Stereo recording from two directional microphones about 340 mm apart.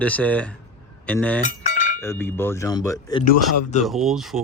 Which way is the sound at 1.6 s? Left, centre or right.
Left.